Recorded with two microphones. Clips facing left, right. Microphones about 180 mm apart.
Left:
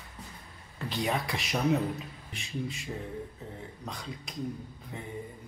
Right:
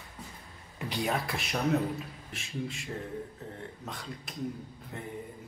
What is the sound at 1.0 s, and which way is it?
A man's voice, centre (ahead or behind).